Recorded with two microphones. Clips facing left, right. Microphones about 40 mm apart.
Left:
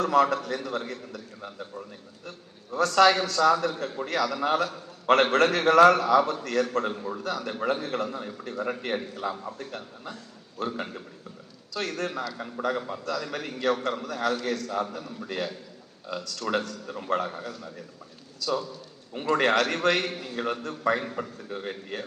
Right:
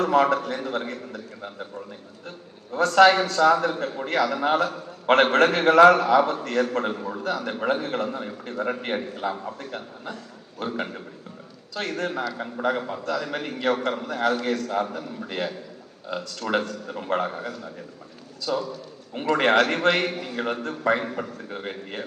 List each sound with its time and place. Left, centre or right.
0.0 s a man's voice: right
2.7 s a man's voice: right
21.5 s a man's voice: right